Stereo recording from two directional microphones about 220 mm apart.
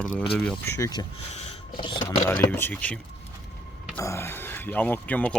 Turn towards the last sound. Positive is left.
turn(degrees=5)  # may be behind; listen again after turning